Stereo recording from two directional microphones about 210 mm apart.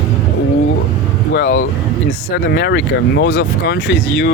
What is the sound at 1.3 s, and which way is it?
Speech, 50° left (ahead or behind).